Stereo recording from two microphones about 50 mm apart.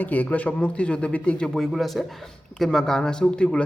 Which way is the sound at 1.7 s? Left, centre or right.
Centre.